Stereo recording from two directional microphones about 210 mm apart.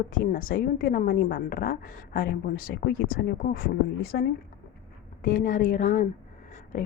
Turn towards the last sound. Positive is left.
turn(degrees=40)  # may be behind; listen again after turning